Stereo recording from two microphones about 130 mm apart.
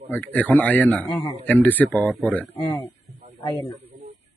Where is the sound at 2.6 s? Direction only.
35° left (ahead or behind).